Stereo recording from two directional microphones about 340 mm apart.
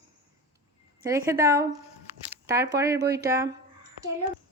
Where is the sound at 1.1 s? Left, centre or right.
Centre.